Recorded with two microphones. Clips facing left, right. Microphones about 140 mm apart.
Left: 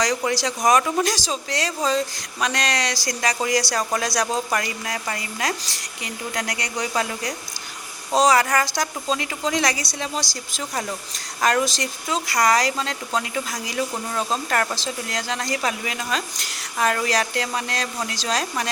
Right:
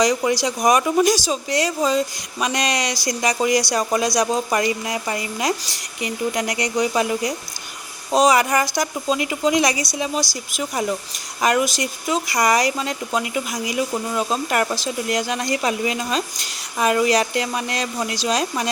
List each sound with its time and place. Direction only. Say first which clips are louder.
0.0 s speech: right 4 dB; 10° right (ahead or behind)
11.4 s speech: right 2 dB; 10° right (ahead or behind)